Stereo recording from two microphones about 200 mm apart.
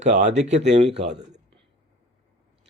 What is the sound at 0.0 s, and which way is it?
Speech, 35° right (ahead or behind).